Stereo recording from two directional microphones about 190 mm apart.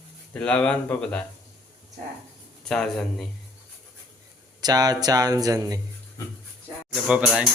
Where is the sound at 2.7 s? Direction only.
Centre (ahead or behind).